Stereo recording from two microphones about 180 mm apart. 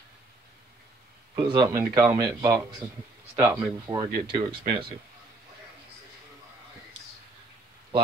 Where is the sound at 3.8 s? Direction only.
20° right (ahead or behind).